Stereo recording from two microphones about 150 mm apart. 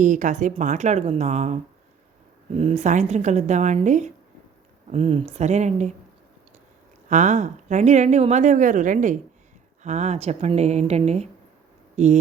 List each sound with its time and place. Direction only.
0.0 s speech: 55° right (ahead or behind)
4.9 s speech: 40° right (ahead or behind)
7.1 s speech: 55° right (ahead or behind)